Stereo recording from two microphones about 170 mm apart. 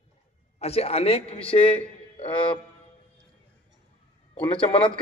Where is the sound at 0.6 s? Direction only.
40° left (ahead or behind).